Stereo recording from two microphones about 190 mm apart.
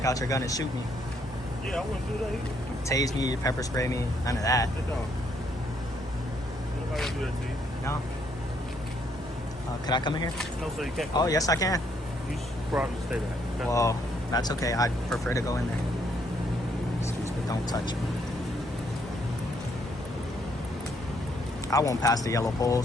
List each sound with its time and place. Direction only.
0.0 s speech: 15° left (ahead or behind)
2.9 s speech: 20° left (ahead or behind)
9.8 s speech: 25° left (ahead or behind)
10.3 s speech: centre (ahead or behind)
11.1 s speech: 20° left (ahead or behind)
12.7 s speech: 5° right (ahead or behind)
13.7 s speech: 15° left (ahead or behind)
17.5 s speech: 20° left (ahead or behind)
21.7 s speech: 15° left (ahead or behind)